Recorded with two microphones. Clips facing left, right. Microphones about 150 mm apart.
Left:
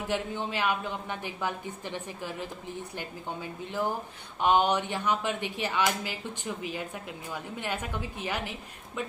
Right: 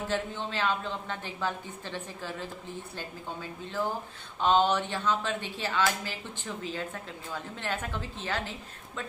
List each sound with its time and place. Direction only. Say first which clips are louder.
0.1 s speech: left 3 dB; 15° left (ahead or behind)